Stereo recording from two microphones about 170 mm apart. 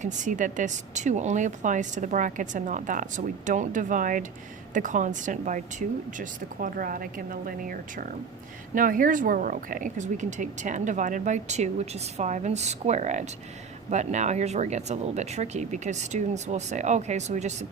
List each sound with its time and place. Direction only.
0.0 s speech: 45° right (ahead or behind)